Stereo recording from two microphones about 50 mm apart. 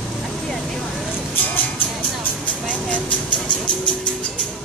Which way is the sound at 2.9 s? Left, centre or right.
Left.